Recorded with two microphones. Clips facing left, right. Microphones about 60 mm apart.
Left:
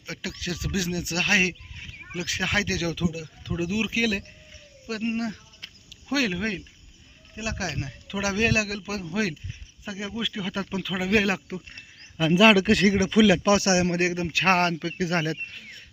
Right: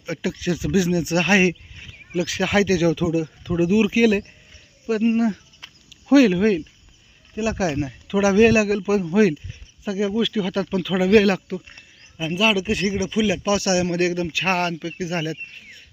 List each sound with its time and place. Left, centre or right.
0.0 s speech: centre
0.9 s speech: right
2.2 s a man's voice: centre
3.1 s speech: right
4.9 s a sound: centre
7.3 s a man's voice: centre
9.8 s speech: centre
11.2 s speech: centre
12.2 s a man's voice: left
13.4 s speech: left
14.3 s speech: left
14.8 s speech: left